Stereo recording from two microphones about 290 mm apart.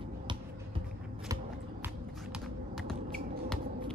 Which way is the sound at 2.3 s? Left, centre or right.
Centre.